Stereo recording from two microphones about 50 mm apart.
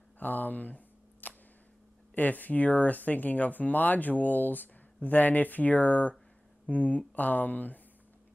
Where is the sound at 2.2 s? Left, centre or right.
Left.